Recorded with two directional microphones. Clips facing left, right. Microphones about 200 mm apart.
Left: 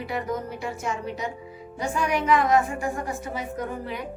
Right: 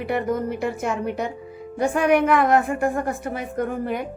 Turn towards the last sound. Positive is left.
turn(degrees=-55)  # may be behind; listen again after turning